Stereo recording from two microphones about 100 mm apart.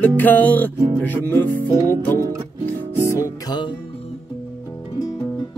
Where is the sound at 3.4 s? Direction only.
50° left (ahead or behind).